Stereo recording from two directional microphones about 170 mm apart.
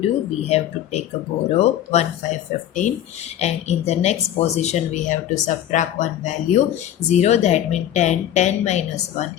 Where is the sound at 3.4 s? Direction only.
40° left (ahead or behind).